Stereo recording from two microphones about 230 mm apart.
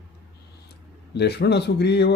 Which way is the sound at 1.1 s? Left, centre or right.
Left.